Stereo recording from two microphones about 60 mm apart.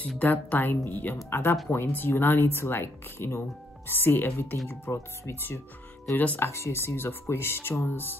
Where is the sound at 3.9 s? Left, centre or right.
Left.